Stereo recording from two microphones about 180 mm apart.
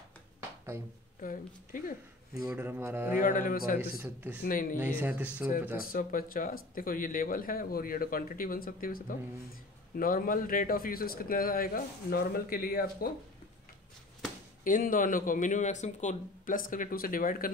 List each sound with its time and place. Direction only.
1.2 s speech: 50° left (ahead or behind)
2.5 s speech: 10° right (ahead or behind)
3.2 s speech: 50° left (ahead or behind)
4.0 s speech: 10° right (ahead or behind)
4.4 s speech: 50° left (ahead or behind)
4.7 s speech: 10° right (ahead or behind)
5.9 s speech: 50° left (ahead or behind)
14.6 s speech: 50° left (ahead or behind)